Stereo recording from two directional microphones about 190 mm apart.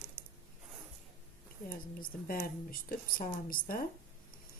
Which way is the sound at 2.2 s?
50° left (ahead or behind).